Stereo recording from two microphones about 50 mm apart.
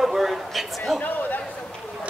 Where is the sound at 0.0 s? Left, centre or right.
Centre.